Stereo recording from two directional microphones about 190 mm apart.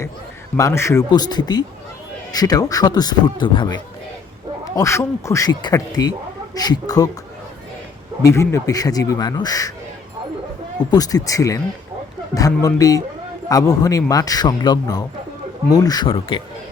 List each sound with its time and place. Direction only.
0.5 s speech: 15° left (ahead or behind)
8.2 s speech: 15° left (ahead or behind)
10.9 s speech: 20° left (ahead or behind)